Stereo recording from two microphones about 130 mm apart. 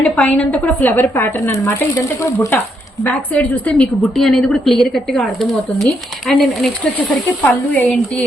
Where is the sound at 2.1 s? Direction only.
20° left (ahead or behind).